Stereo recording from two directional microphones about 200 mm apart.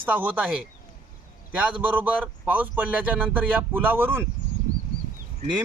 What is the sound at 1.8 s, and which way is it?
Speech, 10° right (ahead or behind).